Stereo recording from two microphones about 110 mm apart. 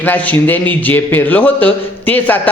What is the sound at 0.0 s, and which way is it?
A man's voice, 15° left (ahead or behind).